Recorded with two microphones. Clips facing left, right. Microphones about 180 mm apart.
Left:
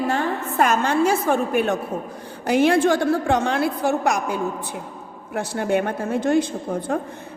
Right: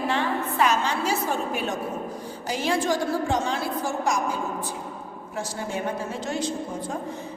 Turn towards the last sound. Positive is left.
turn(degrees=55)  # may be behind; listen again after turning